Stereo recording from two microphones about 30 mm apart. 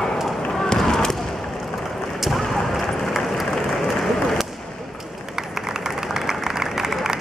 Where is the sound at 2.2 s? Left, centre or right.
Centre.